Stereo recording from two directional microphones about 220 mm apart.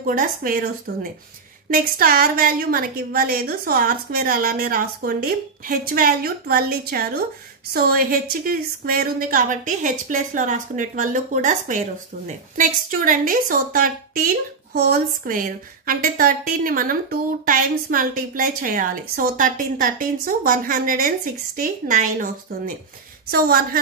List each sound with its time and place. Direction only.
0.0 s a woman's voice: 40° right (ahead or behind)
23.3 s a woman's voice: 40° right (ahead or behind)